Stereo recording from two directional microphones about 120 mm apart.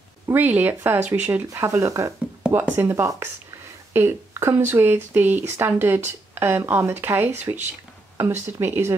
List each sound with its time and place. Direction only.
0.3 s speech: 15° right (ahead or behind)